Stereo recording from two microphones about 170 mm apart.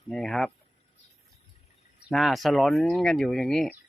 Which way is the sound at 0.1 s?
5° left (ahead or behind).